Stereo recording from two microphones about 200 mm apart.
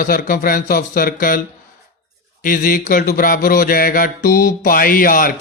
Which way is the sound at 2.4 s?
45° left (ahead or behind).